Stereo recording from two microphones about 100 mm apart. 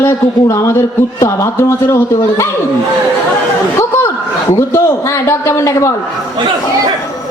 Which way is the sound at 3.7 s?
30° left (ahead or behind).